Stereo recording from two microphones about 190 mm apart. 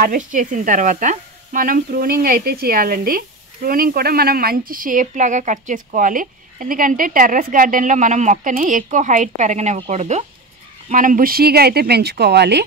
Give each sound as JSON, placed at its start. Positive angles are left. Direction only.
{"t": 0.0, "sound": "speech", "side_deg": -45}